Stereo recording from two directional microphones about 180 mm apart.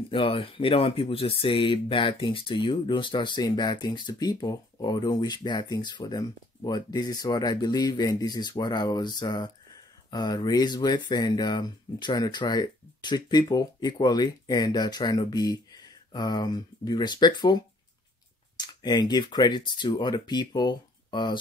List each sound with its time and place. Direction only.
0.1 s speech: 30° left (ahead or behind)
18.6 s speech: 25° left (ahead or behind)